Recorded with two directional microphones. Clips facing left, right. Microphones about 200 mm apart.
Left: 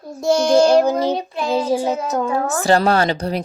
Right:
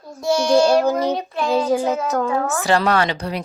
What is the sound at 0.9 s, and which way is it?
Child singing, 30° left (ahead or behind).